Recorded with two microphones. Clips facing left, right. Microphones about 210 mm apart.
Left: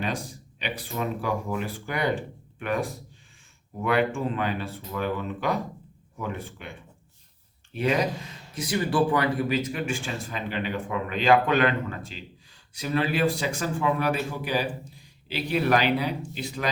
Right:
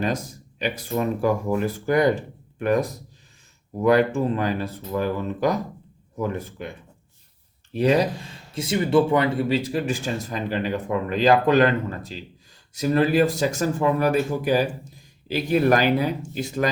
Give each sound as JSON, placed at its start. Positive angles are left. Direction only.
{"t": 0.0, "sound": "speech", "side_deg": -40}